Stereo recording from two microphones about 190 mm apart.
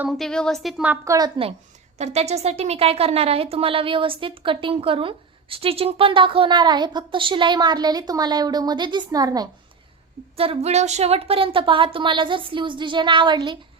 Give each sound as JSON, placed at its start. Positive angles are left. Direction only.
{"t": 0.0, "sound": "a woman's voice", "side_deg": 0}
{"t": 2.0, "sound": "speech", "side_deg": -35}
{"t": 10.3, "sound": "speech", "side_deg": -30}